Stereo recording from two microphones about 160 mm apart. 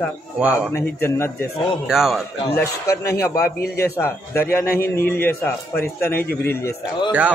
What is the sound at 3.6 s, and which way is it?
Speech, 80° left.